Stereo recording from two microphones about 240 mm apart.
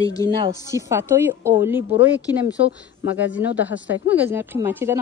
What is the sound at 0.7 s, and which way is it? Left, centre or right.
Speech, centre.